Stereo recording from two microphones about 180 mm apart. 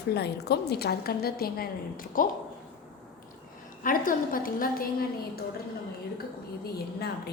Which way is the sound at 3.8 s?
50° left (ahead or behind).